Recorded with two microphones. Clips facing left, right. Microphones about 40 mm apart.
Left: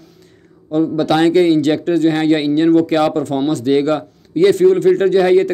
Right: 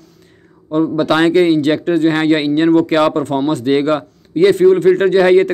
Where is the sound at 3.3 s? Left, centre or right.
Right.